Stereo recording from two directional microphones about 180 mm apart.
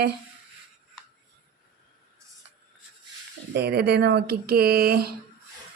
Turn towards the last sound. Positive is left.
turn(degrees=-55)  # may be behind; listen again after turning